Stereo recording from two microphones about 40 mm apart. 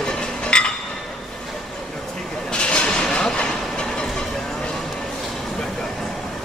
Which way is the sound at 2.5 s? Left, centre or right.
Left.